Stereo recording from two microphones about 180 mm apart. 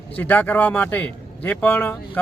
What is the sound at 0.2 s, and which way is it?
Speech, 10° left (ahead or behind).